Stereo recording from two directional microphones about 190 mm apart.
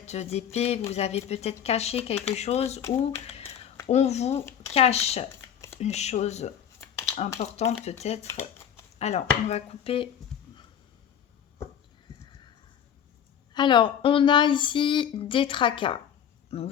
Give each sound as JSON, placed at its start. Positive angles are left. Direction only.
{"t": 0.0, "sound": "speech", "side_deg": 35}
{"t": 3.2, "sound": "whispering", "side_deg": 30}
{"t": 3.8, "sound": "speech", "side_deg": 35}
{"t": 4.4, "sound": "speech", "side_deg": 15}
{"t": 4.7, "sound": "speech", "side_deg": 35}
{"t": 5.3, "sound": "a sound", "side_deg": 15}
{"t": 5.8, "sound": "speech", "side_deg": 35}
{"t": 13.5, "sound": "speech", "side_deg": 25}